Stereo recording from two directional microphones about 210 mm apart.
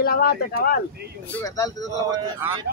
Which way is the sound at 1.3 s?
15° left (ahead or behind).